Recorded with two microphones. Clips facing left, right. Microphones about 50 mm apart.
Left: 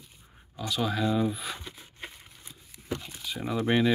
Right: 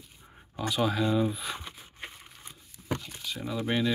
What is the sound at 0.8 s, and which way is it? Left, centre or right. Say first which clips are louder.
Speech: even; centre.